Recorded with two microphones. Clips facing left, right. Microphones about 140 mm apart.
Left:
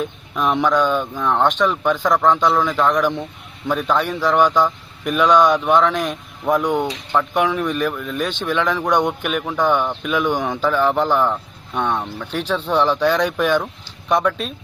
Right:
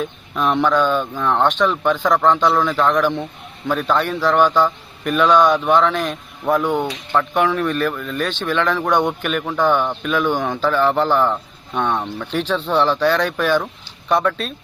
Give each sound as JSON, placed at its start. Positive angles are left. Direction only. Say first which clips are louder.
{"t": 0.0, "sound": "a man's voice", "louder": "even", "side_deg": 5}